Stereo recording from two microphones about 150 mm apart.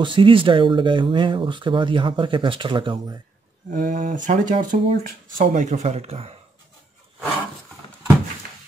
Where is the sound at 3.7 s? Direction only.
65° right (ahead or behind); by 6.3 s 45° right (ahead or behind).